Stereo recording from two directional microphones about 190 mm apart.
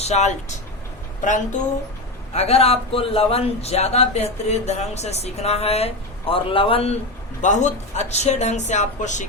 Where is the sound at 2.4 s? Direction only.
30° left (ahead or behind).